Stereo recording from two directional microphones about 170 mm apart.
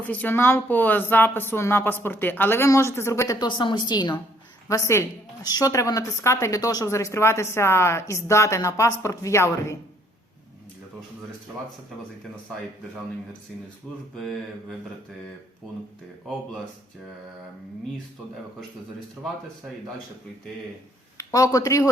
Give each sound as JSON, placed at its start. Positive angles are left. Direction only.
{"t": 0.1, "sound": "a woman's voice", "side_deg": 10}
{"t": 3.3, "sound": "a woman's voice", "side_deg": 25}
{"t": 14.2, "sound": "mantra", "side_deg": 0}
{"t": 19.2, "sound": "mantra", "side_deg": -5}
{"t": 21.2, "sound": "speech", "side_deg": 20}